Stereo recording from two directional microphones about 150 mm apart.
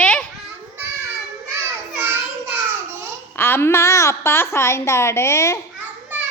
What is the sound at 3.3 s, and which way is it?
A woman's voice, 15° left (ahead or behind).